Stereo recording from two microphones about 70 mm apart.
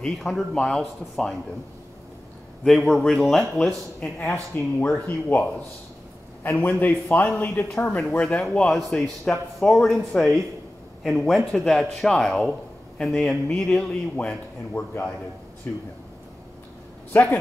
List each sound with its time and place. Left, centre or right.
0.0 s a man's voice: centre
2.6 s speech: centre
4.6 s speech: left
6.8 s speech: left
8.1 s a man's voice: centre
12.4 s a sound: centre
13.0 s speech: centre
14.1 s speech: left
17.1 s speech: left